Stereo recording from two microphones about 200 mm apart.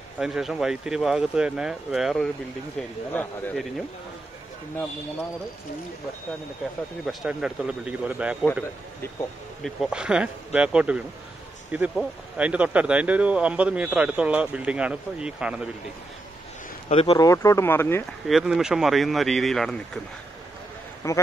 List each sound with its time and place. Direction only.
0.2 s speech: centre (ahead or behind)
3.1 s speech: 10° left (ahead or behind)
7.1 s speech: 5° right (ahead or behind)
9.6 s speech: centre (ahead or behind)
16.9 s speech: 30° left (ahead or behind)
17.3 s speech: 15° left (ahead or behind)
18.2 s speech: centre (ahead or behind)
21.0 s speech: 15° left (ahead or behind)